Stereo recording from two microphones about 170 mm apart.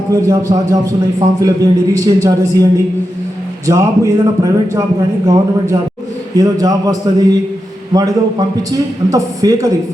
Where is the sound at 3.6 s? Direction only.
20° right (ahead or behind).